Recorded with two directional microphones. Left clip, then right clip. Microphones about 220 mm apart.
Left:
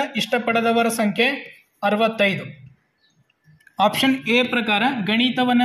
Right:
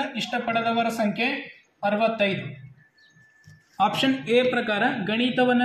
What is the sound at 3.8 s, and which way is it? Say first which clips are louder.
Speech: left 4 dB; 55° left (ahead or behind).